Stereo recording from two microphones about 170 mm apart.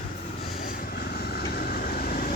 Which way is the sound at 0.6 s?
55° left (ahead or behind).